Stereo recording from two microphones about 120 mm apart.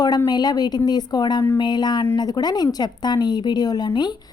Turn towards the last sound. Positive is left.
turn(degrees=40)  # may be behind; listen again after turning